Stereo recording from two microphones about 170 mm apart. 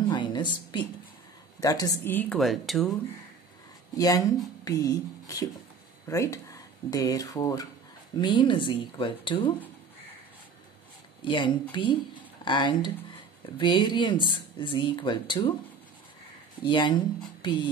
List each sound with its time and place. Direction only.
0.1 s a sound: 25° left (ahead or behind)
1.6 s speech: 20° left (ahead or behind)
2.1 s speech: 5° left (ahead or behind)
3.9 s speech: 20° left (ahead or behind)
11.2 s speech: 30° left (ahead or behind)
16.6 s speech: 30° left (ahead or behind)